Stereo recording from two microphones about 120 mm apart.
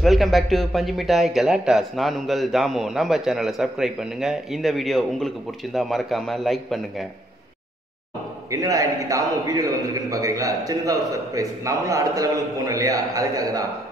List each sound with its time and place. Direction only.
0.0 s speech: centre (ahead or behind)
8.5 s a man's voice: 30° right (ahead or behind)